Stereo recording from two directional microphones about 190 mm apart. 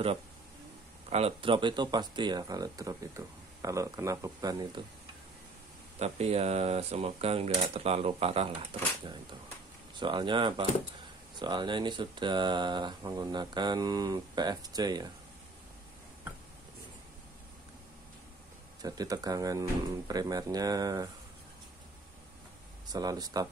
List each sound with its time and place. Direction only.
1.1 s speech: 30° right (ahead or behind)
5.9 s speech: 35° right (ahead or behind)
18.8 s speech: 20° right (ahead or behind)
22.9 s speech: 20° right (ahead or behind)